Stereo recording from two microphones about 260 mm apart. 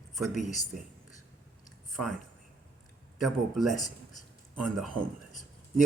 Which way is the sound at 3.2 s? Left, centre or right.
Centre.